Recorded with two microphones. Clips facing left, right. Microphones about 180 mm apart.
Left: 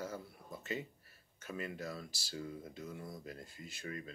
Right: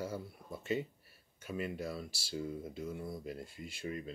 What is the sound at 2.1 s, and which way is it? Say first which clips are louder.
Speech: right 5 dB; 30° right (ahead or behind).